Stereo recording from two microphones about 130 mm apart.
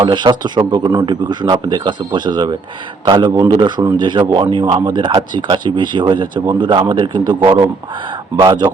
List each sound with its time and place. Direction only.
0.0 s speech: 35° right (ahead or behind)